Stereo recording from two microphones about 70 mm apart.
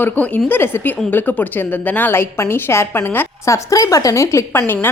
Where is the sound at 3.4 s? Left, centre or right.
Left.